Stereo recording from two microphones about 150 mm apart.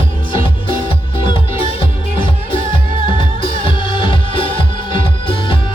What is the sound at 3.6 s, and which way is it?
Music, 35° left (ahead or behind).